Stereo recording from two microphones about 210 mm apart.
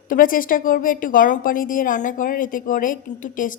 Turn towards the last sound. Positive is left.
turn(degrees=40)  # may be behind; listen again after turning